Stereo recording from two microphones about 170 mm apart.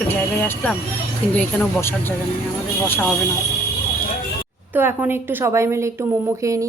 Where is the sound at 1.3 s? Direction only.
10° left (ahead or behind).